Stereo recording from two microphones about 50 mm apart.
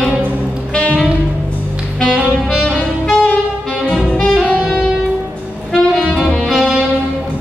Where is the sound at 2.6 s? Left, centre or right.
Centre.